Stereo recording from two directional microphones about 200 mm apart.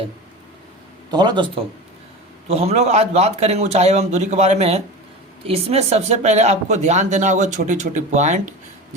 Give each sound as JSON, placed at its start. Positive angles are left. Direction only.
{"t": 1.1, "sound": "speech", "side_deg": -20}